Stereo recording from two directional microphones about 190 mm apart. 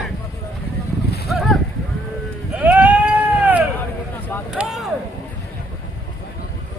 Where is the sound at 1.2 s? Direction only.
Centre (ahead or behind).